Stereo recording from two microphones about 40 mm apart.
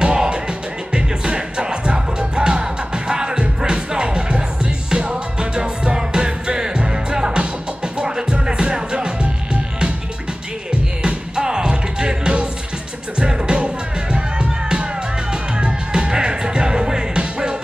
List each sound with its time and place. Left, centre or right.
0.0 s music: right